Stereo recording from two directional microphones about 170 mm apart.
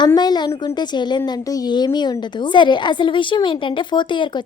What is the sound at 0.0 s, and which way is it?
A woman's voice, 25° left (ahead or behind).